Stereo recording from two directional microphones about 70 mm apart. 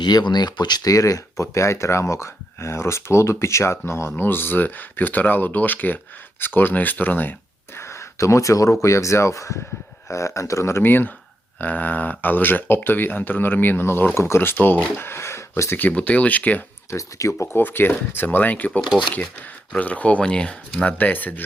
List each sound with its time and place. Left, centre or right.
0.0 s speech: left
4.2 s speech: left
7.8 s a sound: left
8.8 s speech: left
14.9 s a sound: left
15.9 s speech: centre
16.9 s speech: left
17.6 s speech: left